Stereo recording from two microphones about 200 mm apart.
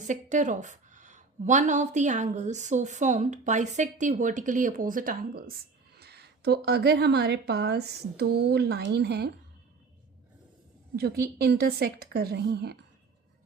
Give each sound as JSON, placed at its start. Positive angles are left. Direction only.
{"t": 0.1, "sound": "a woman's voice", "side_deg": -40}
{"t": 10.9, "sound": "a woman's voice", "side_deg": -50}